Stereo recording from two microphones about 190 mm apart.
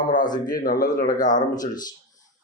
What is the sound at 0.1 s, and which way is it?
A man's voice, 45° left (ahead or behind).